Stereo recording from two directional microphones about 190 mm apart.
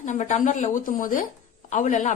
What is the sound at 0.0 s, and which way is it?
Speech, 40° left (ahead or behind).